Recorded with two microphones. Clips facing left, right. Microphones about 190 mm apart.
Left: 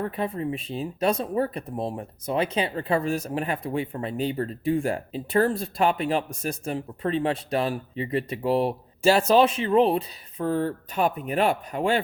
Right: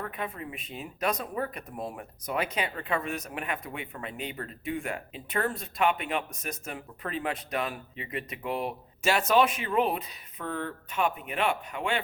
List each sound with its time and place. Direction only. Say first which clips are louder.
0.0 s speech: left 8 dB; 30° left (ahead or behind)